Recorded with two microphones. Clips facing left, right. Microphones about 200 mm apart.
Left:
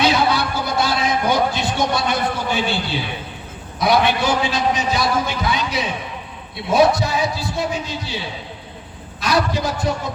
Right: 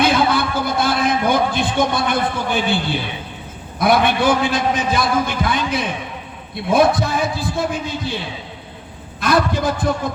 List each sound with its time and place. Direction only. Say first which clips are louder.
0.0 s a sound: right 1 dB; 50° right (ahead or behind)
3.8 s a man's voice: right 1 dB; 55° right (ahead or behind)
9.2 s a man's voice: right 2 dB; 55° right (ahead or behind)